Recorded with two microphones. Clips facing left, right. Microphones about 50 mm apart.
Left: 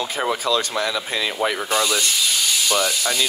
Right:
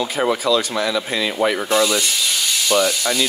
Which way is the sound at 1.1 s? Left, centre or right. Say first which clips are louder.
Right 3 dB; centre.